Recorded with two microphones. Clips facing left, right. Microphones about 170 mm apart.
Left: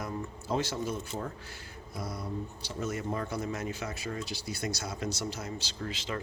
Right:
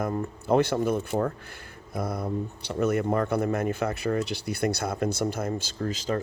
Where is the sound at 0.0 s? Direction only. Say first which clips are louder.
Right 8 dB; 55° right (ahead or behind).